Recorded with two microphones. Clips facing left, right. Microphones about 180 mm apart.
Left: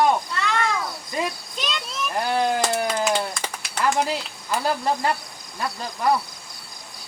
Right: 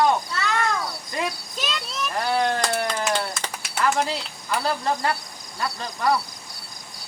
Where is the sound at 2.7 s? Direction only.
5° left (ahead or behind).